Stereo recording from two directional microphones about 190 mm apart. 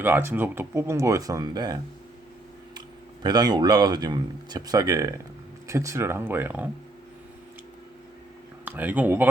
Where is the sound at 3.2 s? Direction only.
20° right (ahead or behind).